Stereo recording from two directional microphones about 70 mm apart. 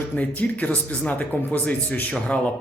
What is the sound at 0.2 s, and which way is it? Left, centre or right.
A man's voice, left.